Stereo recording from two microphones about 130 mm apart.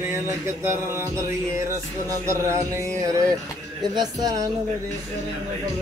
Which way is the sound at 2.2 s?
20° right (ahead or behind).